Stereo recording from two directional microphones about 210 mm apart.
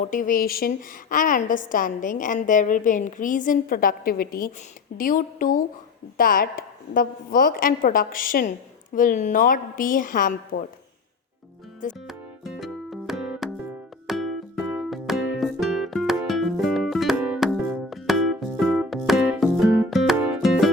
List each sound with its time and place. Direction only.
0.0 s a woman's voice: 40° left (ahead or behind)
12.0 s music: centre (ahead or behind)